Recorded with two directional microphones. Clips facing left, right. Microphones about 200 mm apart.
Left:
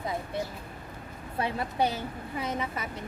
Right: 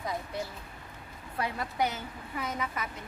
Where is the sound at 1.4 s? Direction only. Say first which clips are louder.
Left 3 dB; 30° left (ahead or behind).